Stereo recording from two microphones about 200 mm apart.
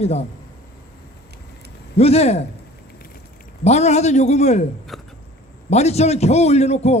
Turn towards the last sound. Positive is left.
turn(degrees=35)  # may be behind; listen again after turning